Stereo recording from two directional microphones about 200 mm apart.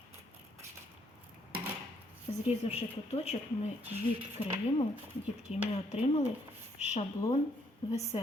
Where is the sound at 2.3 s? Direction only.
30° left (ahead or behind).